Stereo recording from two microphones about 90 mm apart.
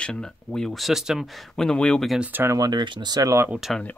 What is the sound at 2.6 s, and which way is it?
Speech, 50° right (ahead or behind).